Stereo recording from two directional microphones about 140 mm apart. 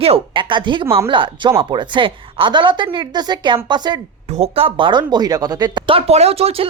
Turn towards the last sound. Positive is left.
turn(degrees=-45)  # may be behind; listen again after turning